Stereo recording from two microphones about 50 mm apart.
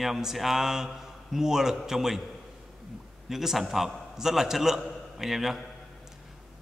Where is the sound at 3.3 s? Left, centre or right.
Centre.